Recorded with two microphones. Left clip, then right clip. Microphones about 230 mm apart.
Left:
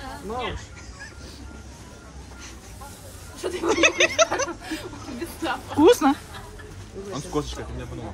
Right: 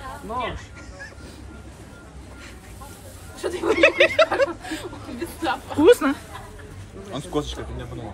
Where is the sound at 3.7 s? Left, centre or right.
Centre.